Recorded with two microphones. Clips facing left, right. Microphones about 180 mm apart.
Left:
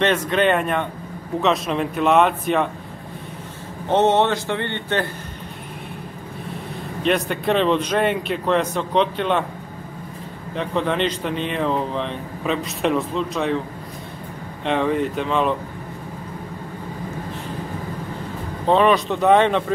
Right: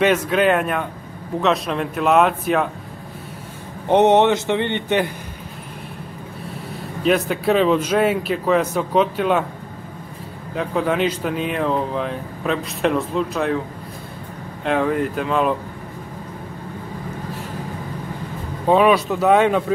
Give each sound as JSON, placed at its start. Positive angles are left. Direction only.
{"t": 0.0, "sound": "speech", "side_deg": -5}
{"t": 3.9, "sound": "a man's voice", "side_deg": -15}
{"t": 7.0, "sound": "speech", "side_deg": -5}
{"t": 10.5, "sound": "speech", "side_deg": -5}
{"t": 14.6, "sound": "speech", "side_deg": 0}
{"t": 18.7, "sound": "a man's voice", "side_deg": -10}